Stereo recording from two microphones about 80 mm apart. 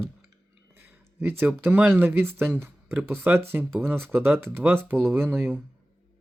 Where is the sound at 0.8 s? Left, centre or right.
Right.